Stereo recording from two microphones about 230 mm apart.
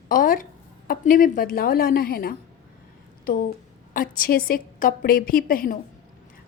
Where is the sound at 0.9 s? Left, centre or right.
Left.